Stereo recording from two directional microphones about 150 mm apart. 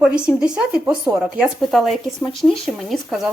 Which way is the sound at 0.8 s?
15° right (ahead or behind).